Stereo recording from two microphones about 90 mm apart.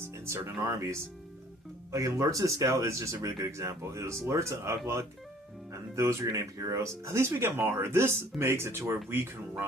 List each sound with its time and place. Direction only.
0.3 s speech: 30° right (ahead or behind)